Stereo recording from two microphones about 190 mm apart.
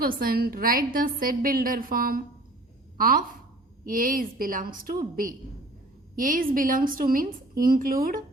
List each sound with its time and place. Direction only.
0.0 s a woman's voice: 50° right (ahead or behind)